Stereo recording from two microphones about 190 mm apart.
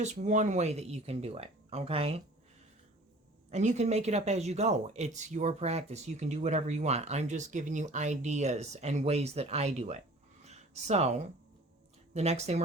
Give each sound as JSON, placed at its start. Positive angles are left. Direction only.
{"t": 0.0, "sound": "speech", "side_deg": -40}
{"t": 3.5, "sound": "speech", "side_deg": -40}
{"t": 10.4, "sound": "a sound", "side_deg": -35}
{"t": 12.1, "sound": "speech", "side_deg": -35}